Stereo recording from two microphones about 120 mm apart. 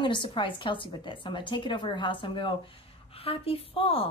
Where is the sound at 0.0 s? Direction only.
45° left (ahead or behind).